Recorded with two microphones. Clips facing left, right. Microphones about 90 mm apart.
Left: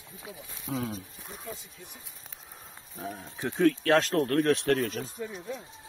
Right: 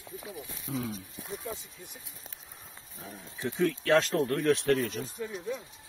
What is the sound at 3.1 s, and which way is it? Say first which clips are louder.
Speech: right 1 dB; 55° left (ahead or behind).